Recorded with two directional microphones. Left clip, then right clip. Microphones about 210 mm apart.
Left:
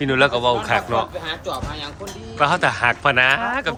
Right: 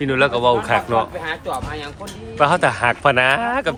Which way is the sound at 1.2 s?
35° right (ahead or behind).